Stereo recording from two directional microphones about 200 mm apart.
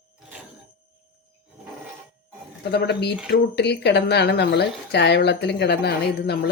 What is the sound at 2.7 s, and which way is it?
Speech, 55° left (ahead or behind).